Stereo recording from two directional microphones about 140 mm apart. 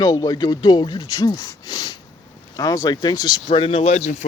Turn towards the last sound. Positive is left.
turn(degrees=45)  # may be behind; listen again after turning